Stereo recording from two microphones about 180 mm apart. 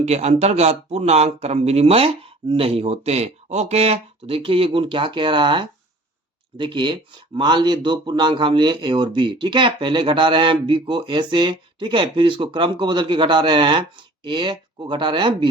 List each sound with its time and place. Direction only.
0.0 s speech: 35° right (ahead or behind)